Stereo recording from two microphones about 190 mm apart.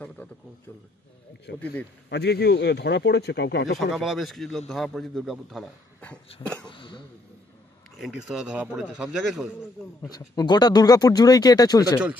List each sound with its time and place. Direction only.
1.5 s speech: 60° left (ahead or behind)
3.9 s a man's voice: centre (ahead or behind)
6.7 s speech: 25° left (ahead or behind)
8.0 s a man's voice: 5° right (ahead or behind)
10.0 s speech: 20° left (ahead or behind)